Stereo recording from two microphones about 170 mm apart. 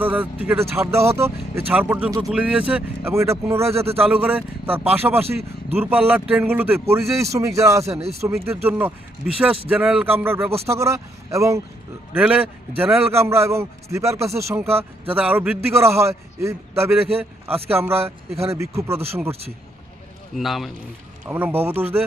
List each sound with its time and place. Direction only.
0.0 s a man's voice: 10° right (ahead or behind)
2.0 s speech: 20° right (ahead or behind)
2.3 s a man's voice: 5° right (ahead or behind)
20.3 s a man's voice: centre (ahead or behind)
21.2 s a man's voice: 10° right (ahead or behind)